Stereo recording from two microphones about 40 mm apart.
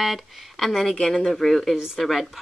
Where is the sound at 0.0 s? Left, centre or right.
Centre.